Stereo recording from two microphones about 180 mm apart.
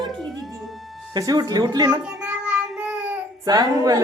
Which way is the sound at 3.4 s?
20° right (ahead or behind).